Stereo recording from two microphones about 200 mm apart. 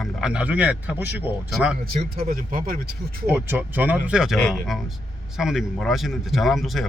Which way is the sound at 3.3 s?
10° right (ahead or behind).